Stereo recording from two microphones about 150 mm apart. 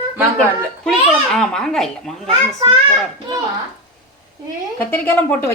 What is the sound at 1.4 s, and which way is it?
Speech, 5° left (ahead or behind).